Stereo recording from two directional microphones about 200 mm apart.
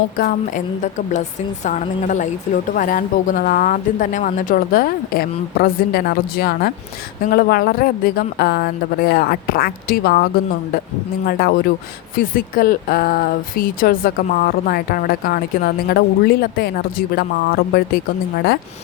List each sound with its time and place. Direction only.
0.2 s a woman's voice: 40° left (ahead or behind)
11.3 s speech: 50° left (ahead or behind)